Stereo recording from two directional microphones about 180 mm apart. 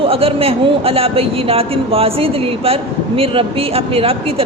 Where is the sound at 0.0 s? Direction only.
30° right (ahead or behind).